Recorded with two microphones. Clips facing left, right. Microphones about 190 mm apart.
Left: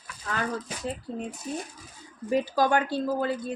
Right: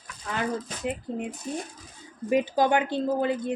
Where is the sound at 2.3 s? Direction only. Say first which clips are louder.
Right 1 dB; 15° right (ahead or behind).